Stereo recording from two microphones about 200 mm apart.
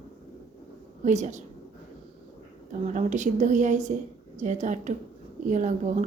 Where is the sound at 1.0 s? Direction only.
35° right (ahead or behind).